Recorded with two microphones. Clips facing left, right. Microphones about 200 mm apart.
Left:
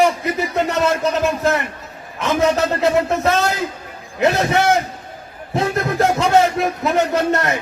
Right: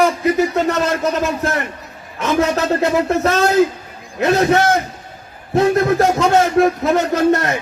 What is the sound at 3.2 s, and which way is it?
A man's voice, 65° right (ahead or behind).